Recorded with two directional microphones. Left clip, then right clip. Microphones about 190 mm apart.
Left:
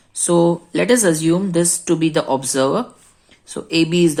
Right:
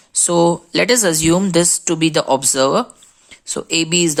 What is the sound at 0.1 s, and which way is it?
Speech, 30° right (ahead or behind).